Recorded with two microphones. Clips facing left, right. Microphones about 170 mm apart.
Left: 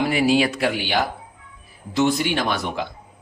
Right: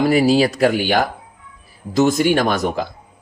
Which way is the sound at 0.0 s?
40° right (ahead or behind).